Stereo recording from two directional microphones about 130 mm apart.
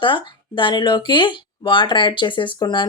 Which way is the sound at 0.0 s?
40° left (ahead or behind).